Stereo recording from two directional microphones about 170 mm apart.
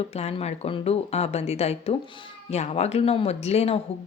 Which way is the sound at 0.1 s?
40° left (ahead or behind).